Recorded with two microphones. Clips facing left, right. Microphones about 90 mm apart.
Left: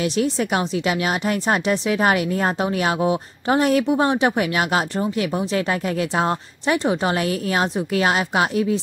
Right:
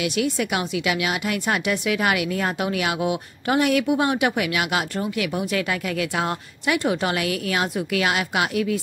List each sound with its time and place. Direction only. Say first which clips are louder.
0.0 s a woman's voice: left 2 dB; 35° left (ahead or behind)